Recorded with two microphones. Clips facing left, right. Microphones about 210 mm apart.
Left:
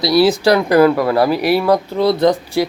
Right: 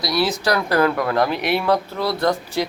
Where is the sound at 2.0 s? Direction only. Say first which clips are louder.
Left 7 dB; 20° left (ahead or behind).